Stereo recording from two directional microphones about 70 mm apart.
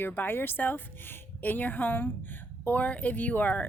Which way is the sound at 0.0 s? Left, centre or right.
Left.